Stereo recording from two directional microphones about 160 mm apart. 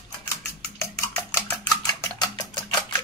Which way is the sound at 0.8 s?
15° left (ahead or behind).